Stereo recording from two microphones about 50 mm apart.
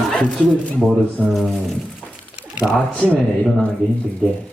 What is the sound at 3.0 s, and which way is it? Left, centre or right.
Speech, left.